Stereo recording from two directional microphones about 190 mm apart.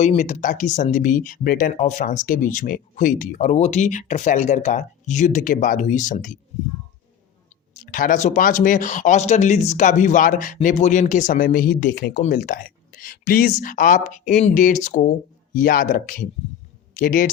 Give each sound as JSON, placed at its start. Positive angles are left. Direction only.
{"t": 0.0, "sound": "speech", "side_deg": 40}
{"t": 7.8, "sound": "speech", "side_deg": 45}